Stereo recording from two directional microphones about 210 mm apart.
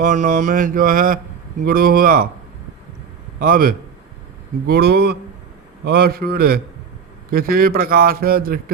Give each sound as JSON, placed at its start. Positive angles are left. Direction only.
{"t": 0.0, "sound": "mantra", "side_deg": -40}
{"t": 1.6, "sound": "a man's voice", "side_deg": -45}
{"t": 3.3, "sound": "a man's voice", "side_deg": -45}